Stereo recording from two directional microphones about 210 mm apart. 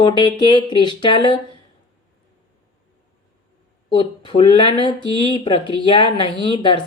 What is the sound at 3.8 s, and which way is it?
Speech, 25° left (ahead or behind).